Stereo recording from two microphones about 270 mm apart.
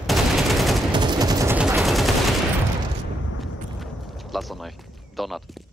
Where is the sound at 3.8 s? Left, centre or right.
Centre.